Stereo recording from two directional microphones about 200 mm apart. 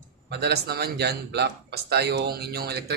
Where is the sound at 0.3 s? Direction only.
55° right (ahead or behind).